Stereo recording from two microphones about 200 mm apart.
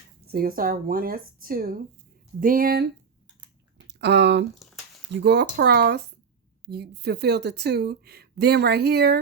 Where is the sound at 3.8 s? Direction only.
55° right (ahead or behind).